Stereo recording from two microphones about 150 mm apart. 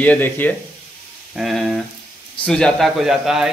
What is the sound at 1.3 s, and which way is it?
Speech, centre (ahead or behind).